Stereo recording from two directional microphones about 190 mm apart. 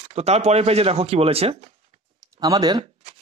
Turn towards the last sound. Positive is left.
turn(degrees=-20)  # may be behind; listen again after turning